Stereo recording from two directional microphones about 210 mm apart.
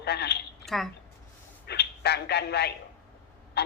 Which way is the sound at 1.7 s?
50° left (ahead or behind).